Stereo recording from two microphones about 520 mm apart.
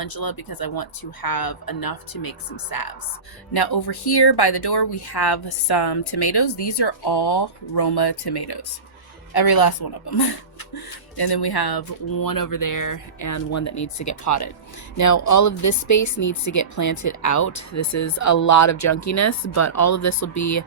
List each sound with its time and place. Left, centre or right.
0.0 s speech: left